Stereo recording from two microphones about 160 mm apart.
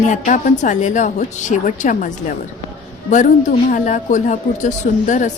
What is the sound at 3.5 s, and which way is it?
A woman's voice, 55° left (ahead or behind).